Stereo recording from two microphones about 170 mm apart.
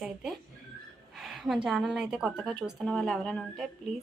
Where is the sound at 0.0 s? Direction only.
Centre (ahead or behind).